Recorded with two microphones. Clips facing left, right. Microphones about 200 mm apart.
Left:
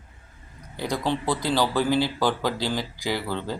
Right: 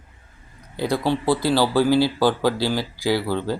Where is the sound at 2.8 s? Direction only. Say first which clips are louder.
Right 6 dB; 15° left (ahead or behind).